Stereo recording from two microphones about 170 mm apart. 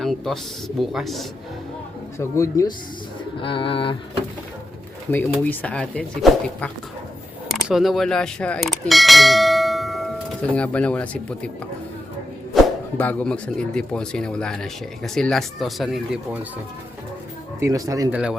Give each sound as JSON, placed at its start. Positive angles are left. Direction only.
{"t": 0.0, "sound": "speech", "side_deg": 0}
{"t": 2.1, "sound": "speech", "side_deg": 20}
{"t": 3.4, "sound": "pigeon", "side_deg": 30}
{"t": 5.1, "sound": "speech", "side_deg": 10}
{"t": 12.5, "sound": "a sound", "side_deg": 0}
{"t": 13.0, "sound": "speech", "side_deg": 10}
{"t": 17.6, "sound": "speech", "side_deg": -20}
{"t": 18.1, "sound": "speech", "side_deg": -5}